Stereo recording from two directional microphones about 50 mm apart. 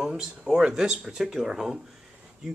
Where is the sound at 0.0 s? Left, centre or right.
Centre.